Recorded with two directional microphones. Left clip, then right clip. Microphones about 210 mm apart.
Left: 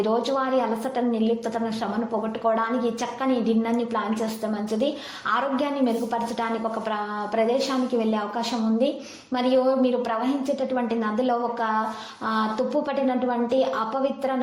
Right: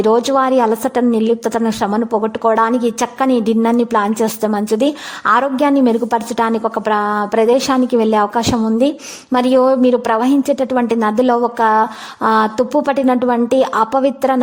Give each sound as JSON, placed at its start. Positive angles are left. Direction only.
{"t": 0.0, "sound": "a woman's voice", "side_deg": -45}